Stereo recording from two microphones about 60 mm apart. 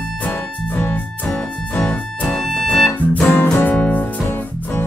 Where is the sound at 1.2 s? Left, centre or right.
Centre.